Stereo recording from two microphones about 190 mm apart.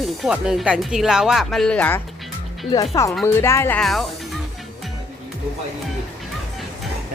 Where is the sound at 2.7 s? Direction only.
20° left (ahead or behind); by 4.4 s centre (ahead or behind).